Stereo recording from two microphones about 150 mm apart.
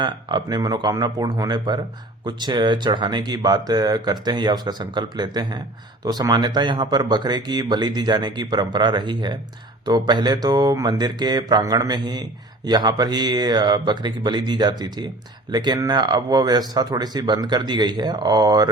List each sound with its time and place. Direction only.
0.0 s speech: 30° right (ahead or behind)